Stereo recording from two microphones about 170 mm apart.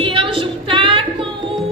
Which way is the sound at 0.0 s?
30° right (ahead or behind).